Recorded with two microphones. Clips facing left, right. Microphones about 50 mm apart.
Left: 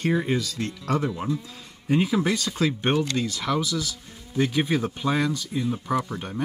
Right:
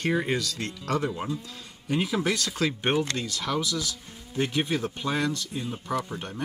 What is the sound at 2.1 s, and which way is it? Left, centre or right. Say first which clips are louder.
Speech: left 3 dB; left.